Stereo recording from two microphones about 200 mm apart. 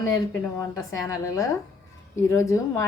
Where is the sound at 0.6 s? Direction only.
15° left (ahead or behind).